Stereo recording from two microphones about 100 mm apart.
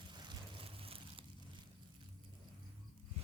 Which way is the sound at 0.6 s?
65° right (ahead or behind).